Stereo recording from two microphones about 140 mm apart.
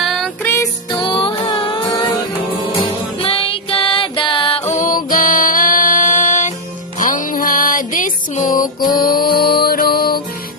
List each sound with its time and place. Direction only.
0.0 s music: centre (ahead or behind)
0.4 s music: 20° left (ahead or behind)
0.9 s music: 35° left (ahead or behind)
3.2 s music: 40° left (ahead or behind)
4.6 s music: 60° left (ahead or behind)
7.0 s music: 75° left (ahead or behind)
8.9 s music: 90° left